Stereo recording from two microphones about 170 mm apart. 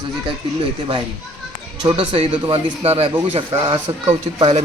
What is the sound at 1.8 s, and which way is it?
A man's voice, 30° right (ahead or behind).